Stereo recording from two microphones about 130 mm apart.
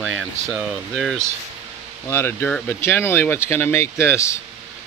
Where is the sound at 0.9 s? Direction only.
Centre (ahead or behind).